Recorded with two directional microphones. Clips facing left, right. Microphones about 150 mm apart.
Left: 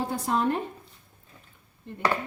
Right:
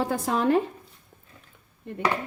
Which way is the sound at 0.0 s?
85° right.